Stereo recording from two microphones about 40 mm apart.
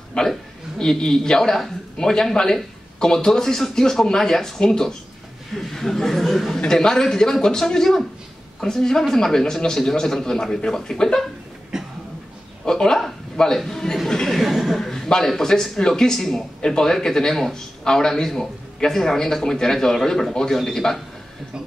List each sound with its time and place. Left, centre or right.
0.2 s a woman's voice: left; by 6.5 s centre
6.7 s speech: centre
11.7 s cough: centre
12.6 s speech: centre
14.4 s speech: centre
14.8 s a sound: centre
15.2 s speech: centre